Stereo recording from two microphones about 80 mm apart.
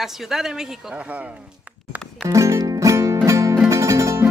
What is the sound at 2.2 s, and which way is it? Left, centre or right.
Music, right.